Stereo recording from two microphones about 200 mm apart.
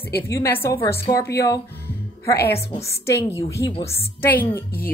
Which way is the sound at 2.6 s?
15° left (ahead or behind).